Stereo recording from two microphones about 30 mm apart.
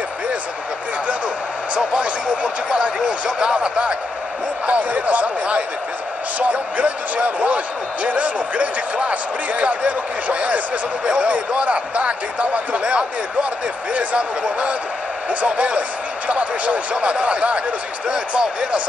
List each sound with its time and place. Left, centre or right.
2.2 s speech: right
4.6 s speech: right